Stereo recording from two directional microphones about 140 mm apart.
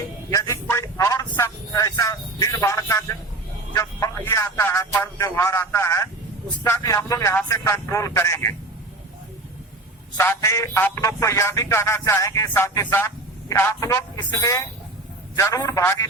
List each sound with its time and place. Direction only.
0.3 s speech: 20° left (ahead or behind)
3.7 s a sound: 20° left (ahead or behind)
4.9 s speech: 15° left (ahead or behind)
10.2 s speech: 20° left (ahead or behind)